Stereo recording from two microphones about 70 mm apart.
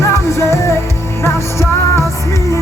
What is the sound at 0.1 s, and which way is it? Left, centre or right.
Music, left.